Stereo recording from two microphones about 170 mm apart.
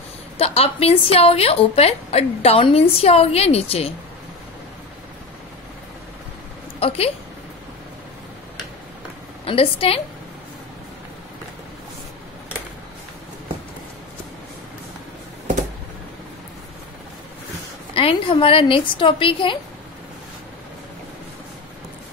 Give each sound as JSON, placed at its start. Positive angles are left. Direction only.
{"t": 0.4, "sound": "a woman's voice", "side_deg": 35}
{"t": 6.8, "sound": "a woman's voice", "side_deg": 35}
{"t": 9.4, "sound": "a woman's voice", "side_deg": 35}
{"t": 17.9, "sound": "a woman's voice", "side_deg": 30}